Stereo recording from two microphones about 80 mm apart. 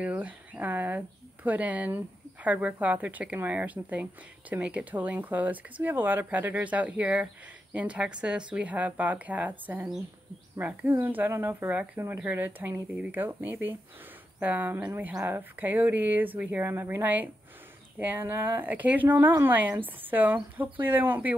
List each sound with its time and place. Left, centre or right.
0.0 s a woman's voice: centre
11.7 s a woman's voice: centre